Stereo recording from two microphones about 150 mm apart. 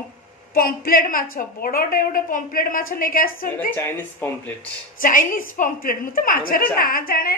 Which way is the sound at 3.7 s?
15° left (ahead or behind).